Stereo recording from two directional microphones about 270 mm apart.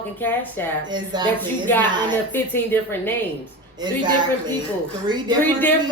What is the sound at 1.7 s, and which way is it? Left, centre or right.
Speech, centre.